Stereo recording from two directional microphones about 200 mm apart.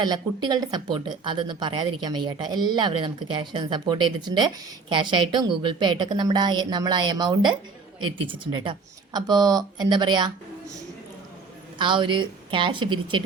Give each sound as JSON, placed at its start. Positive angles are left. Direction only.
{"t": 0.0, "sound": "speech", "side_deg": -20}